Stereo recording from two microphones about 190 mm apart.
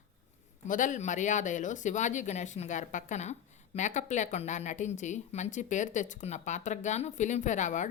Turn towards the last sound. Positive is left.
turn(degrees=40)  # may be behind; listen again after turning